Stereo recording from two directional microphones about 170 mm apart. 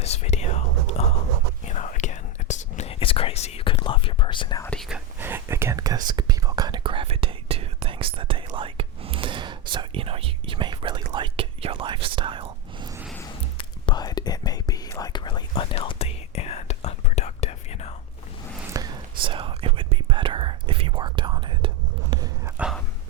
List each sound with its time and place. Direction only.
0.0 s whispering: 40° left (ahead or behind)
4.6 s whispering: 5° left (ahead or behind)
5.2 s whispering: 15° right (ahead or behind); by 12.9 s 30° right (ahead or behind)
13.6 s whispering: 30° left (ahead or behind)
18.7 s whispering: 25° right (ahead or behind)
22.1 s a sound: 20° right (ahead or behind)
22.5 s dog: 5° right (ahead or behind)